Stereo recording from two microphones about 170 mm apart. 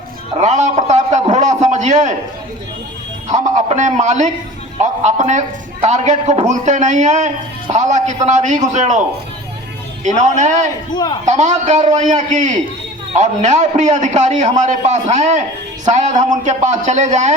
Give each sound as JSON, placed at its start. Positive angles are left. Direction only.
{"t": 0.3, "sound": "a sound", "side_deg": -45}
{"t": 3.7, "sound": "a man's voice", "side_deg": -45}
{"t": 10.9, "sound": "a man's voice", "side_deg": 25}
{"t": 11.3, "sound": "a man's voice", "side_deg": -45}